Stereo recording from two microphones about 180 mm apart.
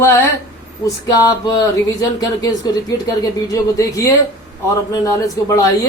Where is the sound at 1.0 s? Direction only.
20° left (ahead or behind).